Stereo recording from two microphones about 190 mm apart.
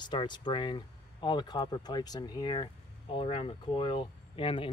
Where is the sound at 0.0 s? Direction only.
25° left (ahead or behind).